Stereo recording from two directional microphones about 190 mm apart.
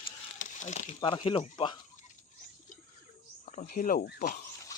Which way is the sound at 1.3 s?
30° left (ahead or behind).